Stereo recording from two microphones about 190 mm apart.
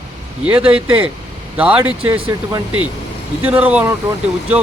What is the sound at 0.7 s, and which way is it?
Speech, 5° right (ahead or behind).